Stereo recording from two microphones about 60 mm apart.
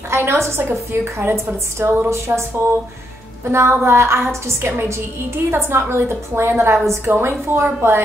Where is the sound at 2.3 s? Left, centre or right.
Right.